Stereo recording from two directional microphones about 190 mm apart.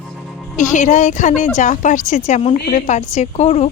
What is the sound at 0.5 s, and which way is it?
Speech, 40° left (ahead or behind).